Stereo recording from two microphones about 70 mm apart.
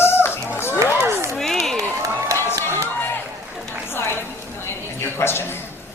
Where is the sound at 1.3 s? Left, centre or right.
Centre.